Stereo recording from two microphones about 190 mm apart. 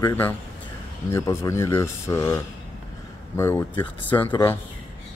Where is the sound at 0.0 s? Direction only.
10° left (ahead or behind).